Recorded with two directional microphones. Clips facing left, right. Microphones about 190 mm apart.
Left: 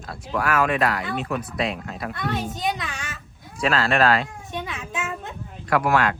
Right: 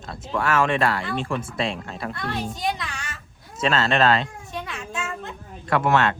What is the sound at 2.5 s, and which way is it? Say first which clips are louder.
Speech: left 1 dB; 20° left (ahead or behind).